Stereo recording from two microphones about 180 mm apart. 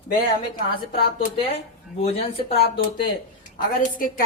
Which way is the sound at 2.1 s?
35° left (ahead or behind).